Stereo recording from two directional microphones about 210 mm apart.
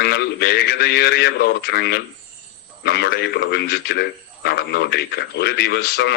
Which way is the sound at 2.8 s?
50° left (ahead or behind).